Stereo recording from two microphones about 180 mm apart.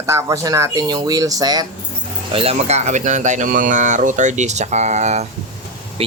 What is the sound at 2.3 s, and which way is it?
Speech, 35° right (ahead or behind).